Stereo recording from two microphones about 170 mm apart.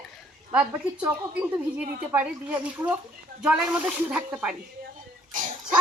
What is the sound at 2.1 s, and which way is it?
Speech, 10° right (ahead or behind).